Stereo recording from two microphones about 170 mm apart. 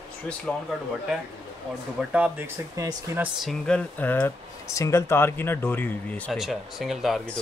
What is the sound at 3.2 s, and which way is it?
Speech, centre (ahead or behind).